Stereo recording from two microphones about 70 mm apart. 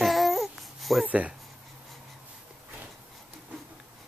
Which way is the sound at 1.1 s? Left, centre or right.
Centre.